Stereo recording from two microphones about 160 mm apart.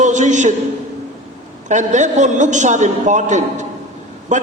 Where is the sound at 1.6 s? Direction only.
50° right (ahead or behind).